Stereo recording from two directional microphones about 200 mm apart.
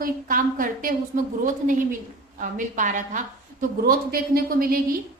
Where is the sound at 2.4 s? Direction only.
40° right (ahead or behind).